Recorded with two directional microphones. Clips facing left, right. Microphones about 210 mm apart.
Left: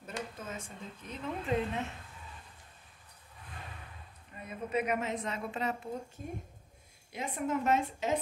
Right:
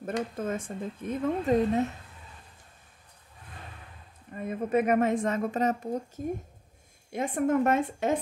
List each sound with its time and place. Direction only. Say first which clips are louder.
0.0 s a woman's voice: right 10 dB; 55° right (ahead or behind)
4.3 s a woman's voice: right 8 dB; 50° right (ahead or behind)